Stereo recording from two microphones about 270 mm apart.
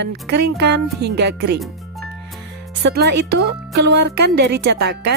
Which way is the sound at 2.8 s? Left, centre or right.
Right.